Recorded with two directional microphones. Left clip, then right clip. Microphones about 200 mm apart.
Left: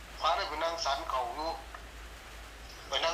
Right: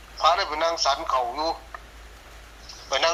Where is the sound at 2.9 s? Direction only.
55° right (ahead or behind).